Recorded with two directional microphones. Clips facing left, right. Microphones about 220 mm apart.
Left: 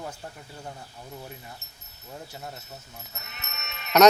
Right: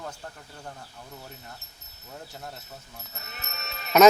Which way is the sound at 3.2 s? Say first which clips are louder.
Right 2 dB; 35° right (ahead or behind).